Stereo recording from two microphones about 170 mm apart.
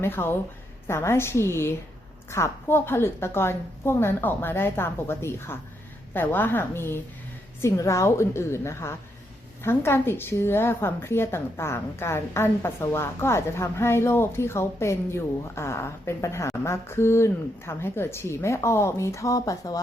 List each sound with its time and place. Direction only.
0.0 s a woman's voice: 15° left (ahead or behind)